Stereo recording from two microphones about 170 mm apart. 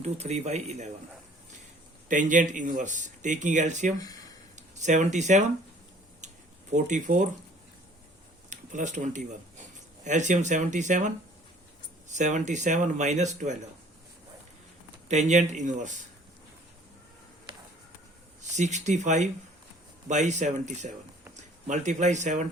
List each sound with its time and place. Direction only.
0.0 s speech: 40° right (ahead or behind)
2.0 s speech: 50° right (ahead or behind)
3.9 s speech: 20° left (ahead or behind)
4.5 s speech: 45° right (ahead or behind)
6.2 s a sound: 45° right (ahead or behind)
8.4 s speech: 45° right (ahead or behind)
12.1 s speech: 45° right (ahead or behind)
15.1 s speech: 45° right (ahead or behind)
18.5 s speech: 45° right (ahead or behind)